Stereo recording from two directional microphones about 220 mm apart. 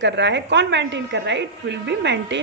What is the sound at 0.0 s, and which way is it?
A woman's voice, 55° right (ahead or behind).